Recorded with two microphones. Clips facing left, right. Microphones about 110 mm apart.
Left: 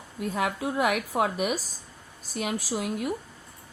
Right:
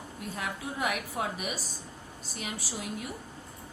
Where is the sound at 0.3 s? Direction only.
75° left (ahead or behind).